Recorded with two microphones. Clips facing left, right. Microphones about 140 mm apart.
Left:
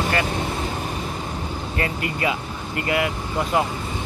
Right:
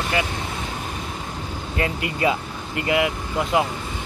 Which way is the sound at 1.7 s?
20° right (ahead or behind).